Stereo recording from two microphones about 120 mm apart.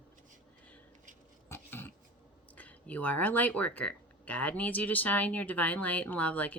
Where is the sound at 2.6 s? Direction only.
10° left (ahead or behind).